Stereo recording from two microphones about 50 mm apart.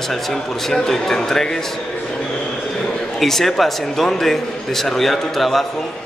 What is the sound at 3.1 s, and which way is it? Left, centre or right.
A man's voice, centre.